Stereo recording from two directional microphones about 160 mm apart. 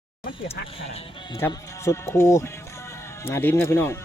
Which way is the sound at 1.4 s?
20° left (ahead or behind).